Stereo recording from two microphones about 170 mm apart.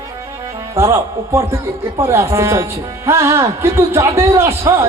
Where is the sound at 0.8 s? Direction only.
15° right (ahead or behind).